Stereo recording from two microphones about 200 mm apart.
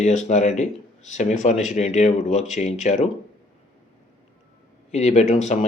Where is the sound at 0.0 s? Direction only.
35° left (ahead or behind).